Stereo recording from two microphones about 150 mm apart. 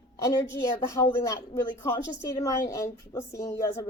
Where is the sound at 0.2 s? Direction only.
25° left (ahead or behind).